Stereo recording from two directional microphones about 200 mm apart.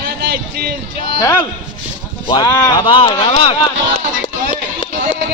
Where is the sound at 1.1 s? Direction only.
15° left (ahead or behind).